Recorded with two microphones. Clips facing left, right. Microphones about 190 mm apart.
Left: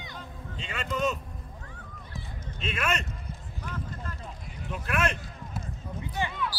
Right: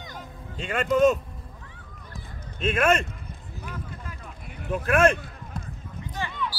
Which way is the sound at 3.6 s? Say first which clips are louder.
Even; 10° right (ahead or behind).